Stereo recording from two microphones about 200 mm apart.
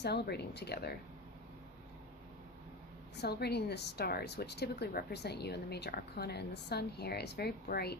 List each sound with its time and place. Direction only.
0.0 s a woman's voice: 55° left (ahead or behind)
3.2 s a woman's voice: 55° left (ahead or behind)